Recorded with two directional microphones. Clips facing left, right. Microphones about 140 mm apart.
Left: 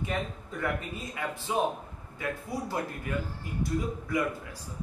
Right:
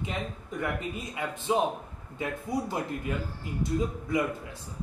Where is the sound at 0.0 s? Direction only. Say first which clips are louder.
Left 1 dB; 20° right (ahead or behind).